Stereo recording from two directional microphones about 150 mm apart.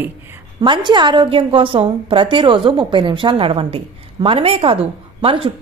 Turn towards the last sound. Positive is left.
turn(degrees=-40)  # may be behind; listen again after turning